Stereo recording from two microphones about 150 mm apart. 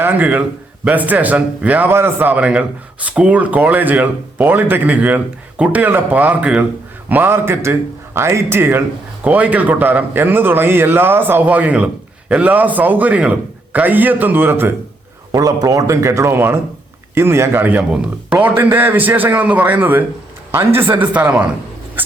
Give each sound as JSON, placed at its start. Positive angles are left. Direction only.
{"t": 0.0, "sound": "speech", "side_deg": -10}